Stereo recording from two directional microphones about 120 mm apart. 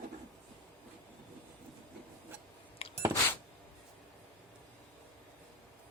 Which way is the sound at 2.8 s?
55° left (ahead or behind).